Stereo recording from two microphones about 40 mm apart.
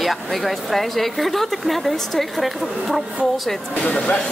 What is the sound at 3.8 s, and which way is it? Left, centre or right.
Speech, left.